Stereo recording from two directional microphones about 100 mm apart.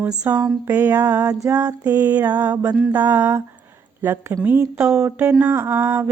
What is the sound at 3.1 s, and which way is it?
Mantra, 25° right (ahead or behind).